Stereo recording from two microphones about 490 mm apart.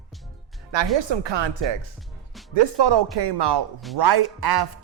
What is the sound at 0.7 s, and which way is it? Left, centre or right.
Speech, right.